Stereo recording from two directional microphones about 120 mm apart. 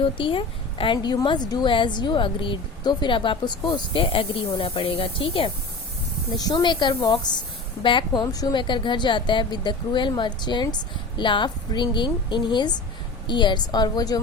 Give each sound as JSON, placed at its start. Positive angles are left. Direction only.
{"t": 0.0, "sound": "a woman's voice", "side_deg": 45}
{"t": 6.3, "sound": "a woman's voice", "side_deg": 35}